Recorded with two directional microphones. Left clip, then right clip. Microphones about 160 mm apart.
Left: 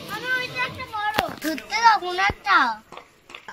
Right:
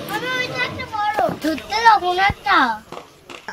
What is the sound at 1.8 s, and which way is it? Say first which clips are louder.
Speech: right 4 dB; 25° right (ahead or behind).